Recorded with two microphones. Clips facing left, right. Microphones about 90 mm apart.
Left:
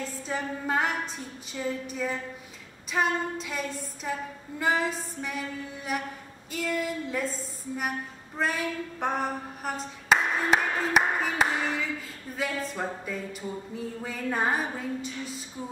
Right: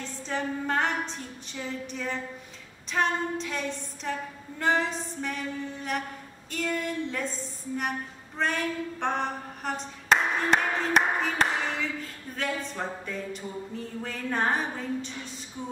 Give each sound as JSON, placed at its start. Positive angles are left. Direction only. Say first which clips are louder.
{"t": 0.3, "sound": "music", "louder": "right 1 dB", "side_deg": 5}
{"t": 8.4, "sound": "clapping", "louder": "even", "side_deg": 5}
{"t": 12.4, "sound": "music", "louder": "left 1 dB", "side_deg": 5}